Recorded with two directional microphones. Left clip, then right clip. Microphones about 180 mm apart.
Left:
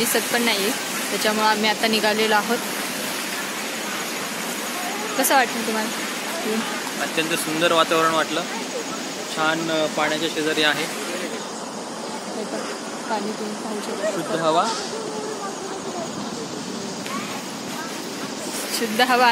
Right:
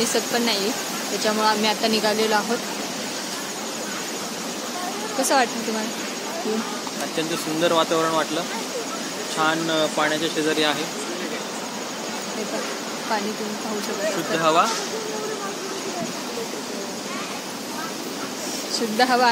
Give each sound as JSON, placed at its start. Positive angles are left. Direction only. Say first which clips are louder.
{"t": 0.1, "sound": "speech", "louder": "left 1 dB", "side_deg": 5}
{"t": 7.2, "sound": "speech", "louder": "left 1 dB", "side_deg": -20}
{"t": 9.4, "sound": "speech", "louder": "even", "side_deg": -20}
{"t": 14.4, "sound": "speech", "louder": "right 1 dB", "side_deg": 5}
{"t": 18.9, "sound": "speech", "louder": "left 1 dB", "side_deg": 5}